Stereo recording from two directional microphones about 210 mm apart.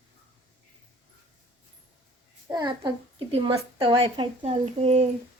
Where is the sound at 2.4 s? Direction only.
20° right (ahead or behind).